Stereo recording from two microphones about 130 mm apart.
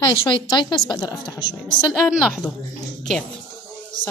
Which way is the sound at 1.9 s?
5° right (ahead or behind).